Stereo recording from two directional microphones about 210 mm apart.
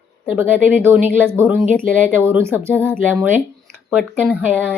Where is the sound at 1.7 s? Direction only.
5° left (ahead or behind).